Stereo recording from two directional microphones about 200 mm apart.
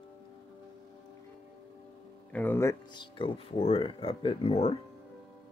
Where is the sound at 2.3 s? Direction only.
10° left (ahead or behind); by 4.8 s 30° left (ahead or behind).